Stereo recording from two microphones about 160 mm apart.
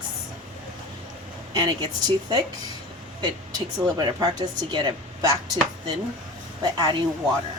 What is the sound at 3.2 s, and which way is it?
Speech, 25° right (ahead or behind).